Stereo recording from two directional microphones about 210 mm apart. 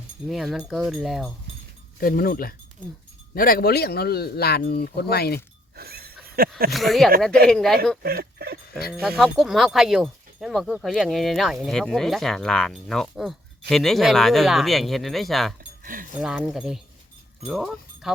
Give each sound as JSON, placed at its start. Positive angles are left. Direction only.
{"t": 0.3, "sound": "speech", "side_deg": 0}
{"t": 2.0, "sound": "speech", "side_deg": 45}
{"t": 5.7, "sound": "a sound", "side_deg": -45}
{"t": 6.7, "sound": "speech", "side_deg": 0}
{"t": 8.0, "sound": "speech", "side_deg": -45}
{"t": 8.9, "sound": "speech", "side_deg": 0}
{"t": 15.8, "sound": "speech", "side_deg": -40}
{"t": 16.2, "sound": "speech", "side_deg": 0}